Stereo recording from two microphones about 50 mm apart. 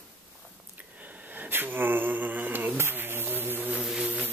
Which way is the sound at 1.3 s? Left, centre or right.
Right.